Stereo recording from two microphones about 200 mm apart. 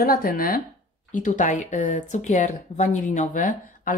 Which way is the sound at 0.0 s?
45° left (ahead or behind).